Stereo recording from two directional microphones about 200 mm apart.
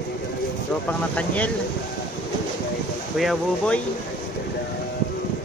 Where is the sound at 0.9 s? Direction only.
5° left (ahead or behind).